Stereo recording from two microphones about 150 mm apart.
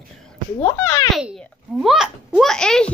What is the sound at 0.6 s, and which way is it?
Speech, 20° left (ahead or behind).